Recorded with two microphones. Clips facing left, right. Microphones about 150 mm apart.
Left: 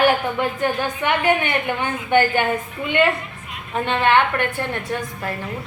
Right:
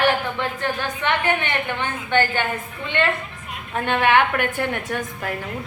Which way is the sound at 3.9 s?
10° right (ahead or behind).